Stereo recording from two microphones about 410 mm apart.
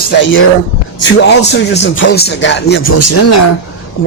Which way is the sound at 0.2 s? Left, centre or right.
Left.